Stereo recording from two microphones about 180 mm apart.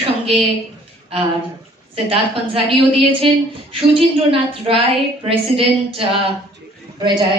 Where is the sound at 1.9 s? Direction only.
30° right (ahead or behind).